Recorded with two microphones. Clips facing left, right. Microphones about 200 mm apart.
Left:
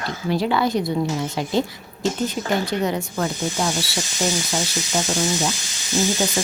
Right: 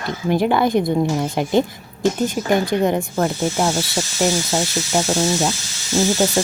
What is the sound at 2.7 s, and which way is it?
Speech, 50° right (ahead or behind).